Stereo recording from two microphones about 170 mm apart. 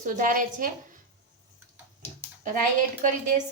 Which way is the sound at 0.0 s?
50° right (ahead or behind).